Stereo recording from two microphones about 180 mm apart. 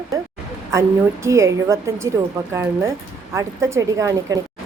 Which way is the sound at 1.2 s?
15° right (ahead or behind).